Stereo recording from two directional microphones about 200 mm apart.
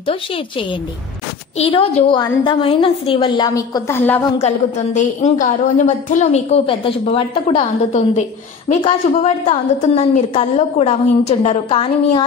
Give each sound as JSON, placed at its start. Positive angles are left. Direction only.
{"t": 0.0, "sound": "a woman's voice", "side_deg": 25}
{"t": 4.4, "sound": "a woman's voice", "side_deg": 35}